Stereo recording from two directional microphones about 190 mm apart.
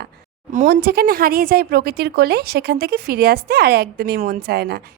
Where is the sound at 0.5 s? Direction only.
50° right (ahead or behind).